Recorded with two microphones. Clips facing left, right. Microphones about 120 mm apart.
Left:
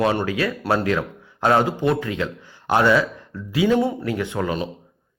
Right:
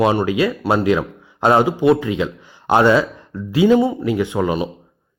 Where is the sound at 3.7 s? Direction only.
5° right (ahead or behind).